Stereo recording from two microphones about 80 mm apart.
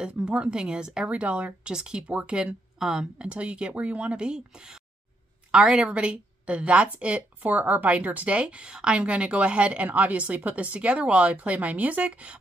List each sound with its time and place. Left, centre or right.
0.0 s a woman's voice: centre